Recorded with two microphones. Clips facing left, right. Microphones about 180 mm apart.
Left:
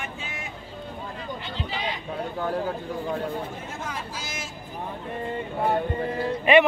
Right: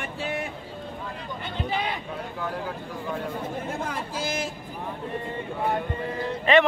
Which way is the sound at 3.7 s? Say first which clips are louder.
Right 3 dB; 55° right (ahead or behind).